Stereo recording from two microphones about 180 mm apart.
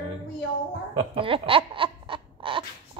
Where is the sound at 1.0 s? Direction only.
30° right (ahead or behind).